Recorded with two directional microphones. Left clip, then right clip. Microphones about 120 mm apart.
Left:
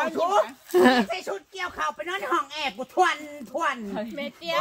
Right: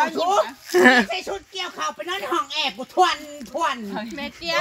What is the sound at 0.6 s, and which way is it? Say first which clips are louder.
Speech: right 6 dB; 15° left (ahead or behind).